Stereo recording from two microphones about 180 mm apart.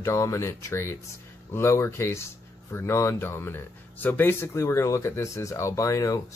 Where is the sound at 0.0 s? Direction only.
15° left (ahead or behind).